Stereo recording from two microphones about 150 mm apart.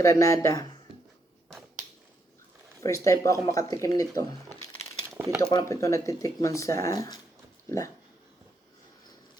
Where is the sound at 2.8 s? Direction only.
20° left (ahead or behind).